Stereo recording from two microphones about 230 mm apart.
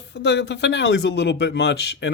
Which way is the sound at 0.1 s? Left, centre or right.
Left.